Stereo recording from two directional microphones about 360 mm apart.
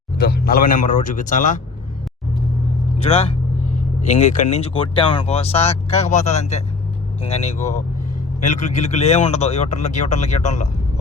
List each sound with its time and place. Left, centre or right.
0.2 s speech: left
3.0 s speech: centre